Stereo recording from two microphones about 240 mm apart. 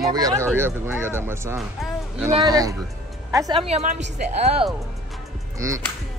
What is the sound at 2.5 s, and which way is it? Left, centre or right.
A woman's voice, centre.